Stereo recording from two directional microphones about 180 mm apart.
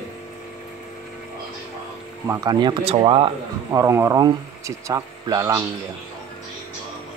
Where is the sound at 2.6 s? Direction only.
30° right (ahead or behind).